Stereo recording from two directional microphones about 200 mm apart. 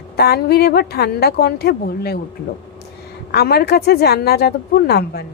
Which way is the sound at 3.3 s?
50° left (ahead or behind).